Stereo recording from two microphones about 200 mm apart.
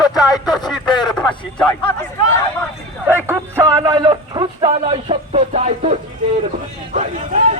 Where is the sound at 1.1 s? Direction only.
5° left (ahead or behind).